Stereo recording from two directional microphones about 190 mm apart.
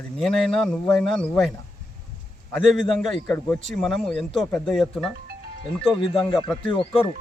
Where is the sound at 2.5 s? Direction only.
Centre (ahead or behind).